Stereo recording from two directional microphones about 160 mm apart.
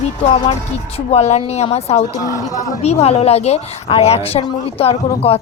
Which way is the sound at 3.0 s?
40° left (ahead or behind).